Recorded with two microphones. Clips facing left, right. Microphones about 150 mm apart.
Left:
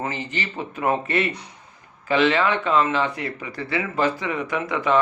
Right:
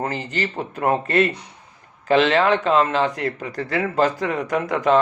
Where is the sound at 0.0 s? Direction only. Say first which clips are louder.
Right 3 dB; 40° right (ahead or behind).